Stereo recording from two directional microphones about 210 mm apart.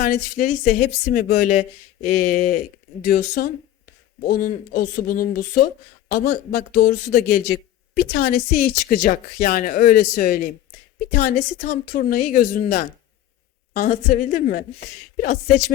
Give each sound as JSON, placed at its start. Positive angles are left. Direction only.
{"t": 0.0, "sound": "a woman's voice", "side_deg": 45}